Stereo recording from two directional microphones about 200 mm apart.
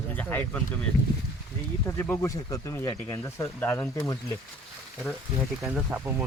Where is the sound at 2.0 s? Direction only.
15° left (ahead or behind).